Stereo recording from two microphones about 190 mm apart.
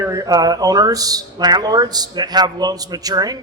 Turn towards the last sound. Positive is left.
turn(degrees=-20)  # may be behind; listen again after turning